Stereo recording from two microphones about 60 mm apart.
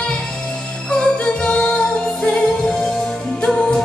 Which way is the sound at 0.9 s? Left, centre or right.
Centre.